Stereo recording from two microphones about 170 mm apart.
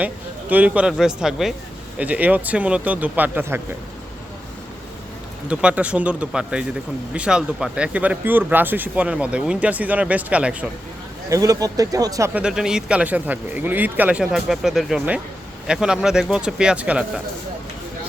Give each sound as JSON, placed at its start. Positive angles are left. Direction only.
{"t": 0.5, "sound": "speech", "side_deg": -10}
{"t": 5.5, "sound": "speech", "side_deg": -5}
{"t": 11.3, "sound": "speech", "side_deg": -20}
{"t": 12.3, "sound": "speech", "side_deg": -5}